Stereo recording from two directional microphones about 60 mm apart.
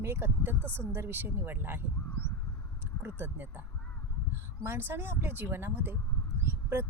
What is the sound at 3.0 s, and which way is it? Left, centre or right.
Speech, right.